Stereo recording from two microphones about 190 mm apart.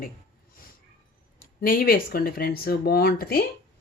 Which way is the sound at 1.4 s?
50° left (ahead or behind).